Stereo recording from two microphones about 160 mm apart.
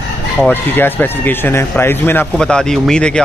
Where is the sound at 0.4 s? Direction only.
10° left (ahead or behind).